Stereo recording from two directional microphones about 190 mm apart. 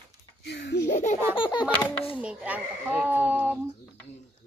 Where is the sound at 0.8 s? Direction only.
40° left (ahead or behind).